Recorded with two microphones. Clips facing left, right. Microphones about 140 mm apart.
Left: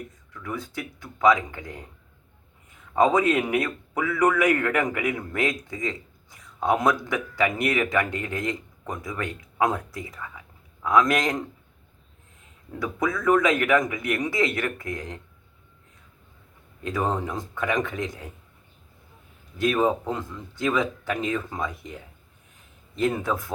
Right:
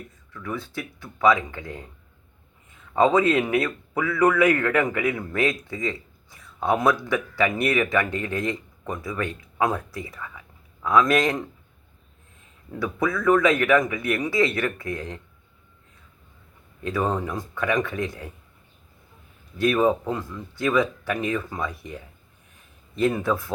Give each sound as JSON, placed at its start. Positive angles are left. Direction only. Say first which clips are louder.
{"t": 0.4, "sound": "a man's voice", "louder": "right 1 dB", "side_deg": 15}
{"t": 2.9, "sound": "a man's voice", "louder": "right 1 dB", "side_deg": 15}
{"t": 11.1, "sound": "speech", "louder": "right 3 dB", "side_deg": 20}
{"t": 12.8, "sound": "speech", "louder": "right 2 dB", "side_deg": 20}
{"t": 16.8, "sound": "speech", "louder": "right 1 dB", "side_deg": 20}
{"t": 19.5, "sound": "speech", "louder": "right 2 dB", "side_deg": 20}
{"t": 23.0, "sound": "speech", "louder": "right 2 dB", "side_deg": 20}